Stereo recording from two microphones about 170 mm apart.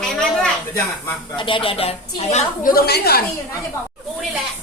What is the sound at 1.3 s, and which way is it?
Speech, 30° left (ahead or behind).